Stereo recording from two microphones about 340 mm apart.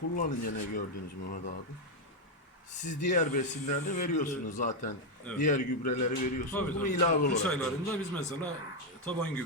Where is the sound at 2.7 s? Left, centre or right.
Left.